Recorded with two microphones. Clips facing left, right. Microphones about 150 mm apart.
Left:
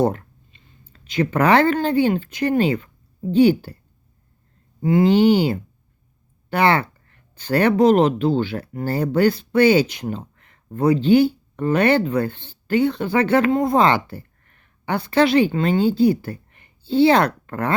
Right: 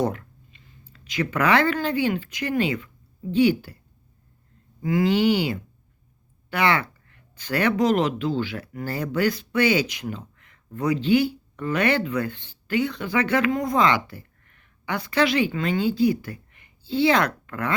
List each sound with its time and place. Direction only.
0.0 s speech: 35° left (ahead or behind)
4.8 s speech: 30° left (ahead or behind)